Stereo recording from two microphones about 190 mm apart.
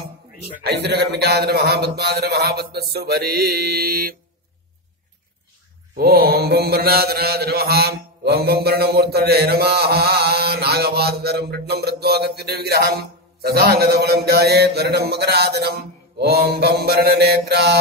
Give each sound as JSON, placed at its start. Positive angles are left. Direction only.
{"t": 0.7, "sound": "mantra", "side_deg": -60}
{"t": 5.9, "sound": "mantra", "side_deg": -55}